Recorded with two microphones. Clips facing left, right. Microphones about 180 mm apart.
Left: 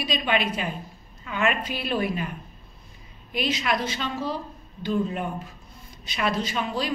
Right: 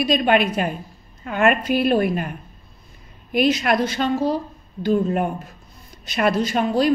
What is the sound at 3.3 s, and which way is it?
A woman's voice, 50° right (ahead or behind).